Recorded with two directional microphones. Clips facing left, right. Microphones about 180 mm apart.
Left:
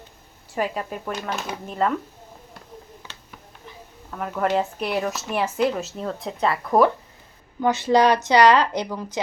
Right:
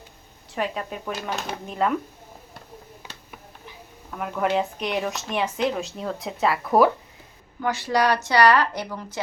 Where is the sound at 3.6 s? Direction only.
Centre (ahead or behind).